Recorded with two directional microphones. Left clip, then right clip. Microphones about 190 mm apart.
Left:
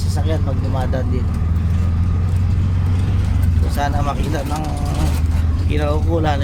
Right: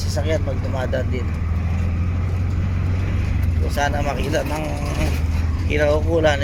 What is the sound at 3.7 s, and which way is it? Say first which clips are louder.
Speech: even; 10° left (ahead or behind).